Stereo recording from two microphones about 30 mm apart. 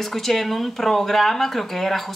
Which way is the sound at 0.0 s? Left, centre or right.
Centre.